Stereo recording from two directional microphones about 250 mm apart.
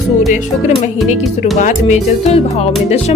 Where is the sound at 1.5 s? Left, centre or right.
Left.